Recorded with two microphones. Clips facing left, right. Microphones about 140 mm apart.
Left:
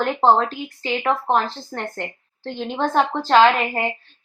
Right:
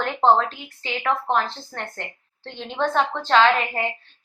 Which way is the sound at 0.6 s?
10° left (ahead or behind).